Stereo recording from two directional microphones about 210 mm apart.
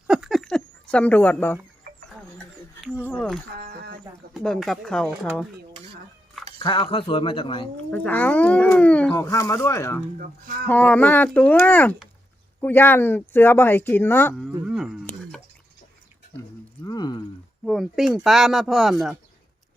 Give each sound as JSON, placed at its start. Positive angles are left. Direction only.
{"t": 0.1, "sound": "a sound", "side_deg": 0}
{"t": 1.9, "sound": "a sound", "side_deg": -45}
{"t": 2.8, "sound": "speech", "side_deg": -5}
{"t": 3.6, "sound": "a sound", "side_deg": -45}
{"t": 4.4, "sound": "speech", "side_deg": 0}
{"t": 6.6, "sound": "speech", "side_deg": 20}
{"t": 7.9, "sound": "speech", "side_deg": 5}
{"t": 10.2, "sound": "speech", "side_deg": -45}
{"t": 10.7, "sound": "speech", "side_deg": 10}
{"t": 14.7, "sound": "wild animals", "side_deg": 0}
{"t": 16.8, "sound": "a sound", "side_deg": 20}
{"t": 17.7, "sound": "speech", "side_deg": 0}